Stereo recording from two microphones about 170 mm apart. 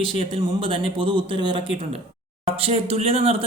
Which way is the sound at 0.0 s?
30° right (ahead or behind).